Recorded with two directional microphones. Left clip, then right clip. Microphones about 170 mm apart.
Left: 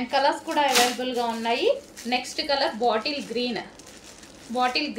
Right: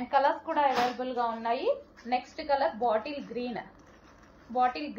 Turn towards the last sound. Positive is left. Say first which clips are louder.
# left 4 dB
turn(degrees=65)  # may be behind; listen again after turning